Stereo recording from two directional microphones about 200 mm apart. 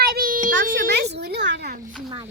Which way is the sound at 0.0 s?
45° right (ahead or behind).